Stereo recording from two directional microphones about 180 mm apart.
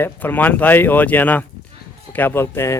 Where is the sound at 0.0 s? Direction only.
10° left (ahead or behind).